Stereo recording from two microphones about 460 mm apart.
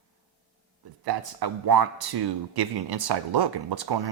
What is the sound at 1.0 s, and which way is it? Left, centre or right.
Speech, right.